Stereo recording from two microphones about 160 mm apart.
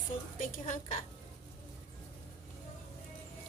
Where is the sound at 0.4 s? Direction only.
50° left (ahead or behind).